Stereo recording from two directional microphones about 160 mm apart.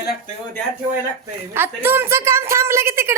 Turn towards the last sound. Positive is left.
turn(degrees=-15)  # may be behind; listen again after turning